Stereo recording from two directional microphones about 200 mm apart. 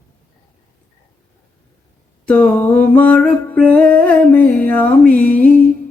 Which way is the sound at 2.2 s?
5° left (ahead or behind).